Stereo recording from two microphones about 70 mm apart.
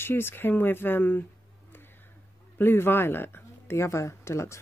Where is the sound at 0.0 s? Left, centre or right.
Left.